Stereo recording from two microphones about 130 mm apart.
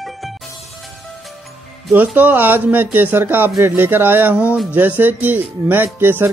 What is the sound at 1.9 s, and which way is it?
Speech, 15° right (ahead or behind).